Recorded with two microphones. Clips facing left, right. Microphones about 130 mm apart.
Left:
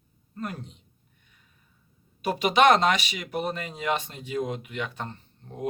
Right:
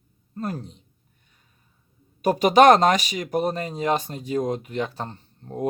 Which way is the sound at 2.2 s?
40° right (ahead or behind).